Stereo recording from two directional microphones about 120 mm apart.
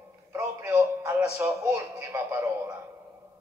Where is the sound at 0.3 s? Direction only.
25° right (ahead or behind).